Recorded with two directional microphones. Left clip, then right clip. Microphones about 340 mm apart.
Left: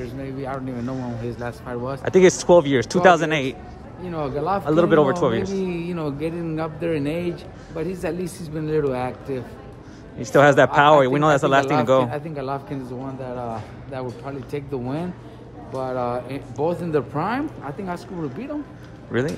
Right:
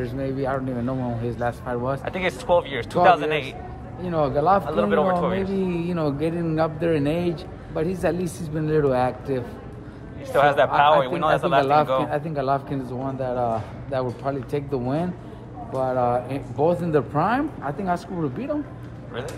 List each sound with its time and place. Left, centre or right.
0.0 s a man's voice: centre
2.0 s speech: left
4.0 s a man's voice: centre
4.6 s speech: left
5.7 s a man's voice: centre
10.2 s speech: left
12.1 s a man's voice: centre